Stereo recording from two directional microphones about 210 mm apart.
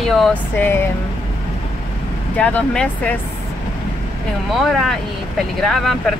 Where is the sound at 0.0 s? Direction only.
Centre (ahead or behind).